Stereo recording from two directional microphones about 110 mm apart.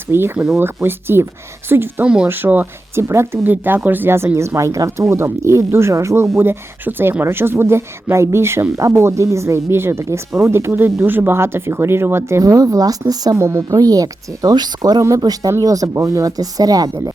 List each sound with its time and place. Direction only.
0.1 s speech: 20° right (ahead or behind)